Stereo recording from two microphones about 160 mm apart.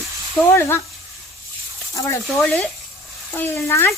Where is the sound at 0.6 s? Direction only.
15° left (ahead or behind).